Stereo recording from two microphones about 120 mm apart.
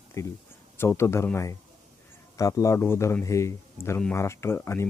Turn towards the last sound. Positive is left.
turn(degrees=20)  # may be behind; listen again after turning